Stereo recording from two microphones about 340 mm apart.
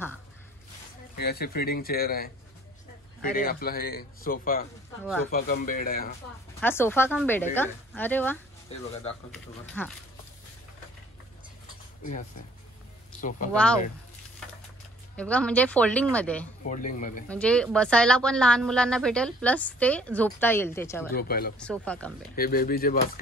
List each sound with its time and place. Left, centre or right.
1.1 s a man's voice: left
6.6 s a woman's voice: centre
8.6 s speech: centre
9.3 s a woman's voice: centre
12.0 s a man's voice: left
15.1 s a woman's voice: centre
16.6 s a man's voice: left
17.3 s a woman's voice: centre
21.1 s a man's voice: left
21.5 s a woman's voice: centre
22.3 s a man's voice: left